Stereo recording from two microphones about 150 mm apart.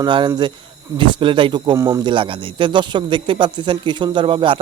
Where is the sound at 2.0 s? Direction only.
35° right (ahead or behind).